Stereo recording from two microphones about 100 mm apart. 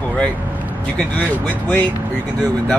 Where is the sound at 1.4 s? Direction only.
15° left (ahead or behind).